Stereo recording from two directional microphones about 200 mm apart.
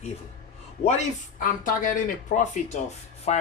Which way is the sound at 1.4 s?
45° left (ahead or behind).